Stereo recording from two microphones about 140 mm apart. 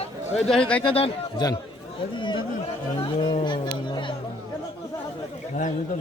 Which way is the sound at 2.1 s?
35° left (ahead or behind).